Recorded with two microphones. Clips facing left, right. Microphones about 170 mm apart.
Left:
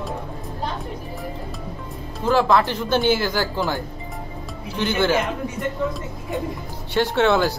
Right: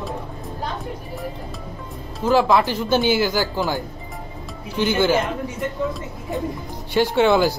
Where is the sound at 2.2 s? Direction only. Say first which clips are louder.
Right 1 dB; 5° right (ahead or behind).